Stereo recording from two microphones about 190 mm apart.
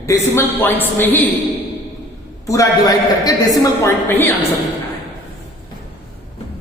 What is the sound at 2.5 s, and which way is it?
A woman's voice, 20° left (ahead or behind).